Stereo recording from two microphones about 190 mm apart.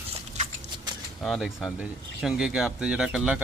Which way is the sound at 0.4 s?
35° right (ahead or behind).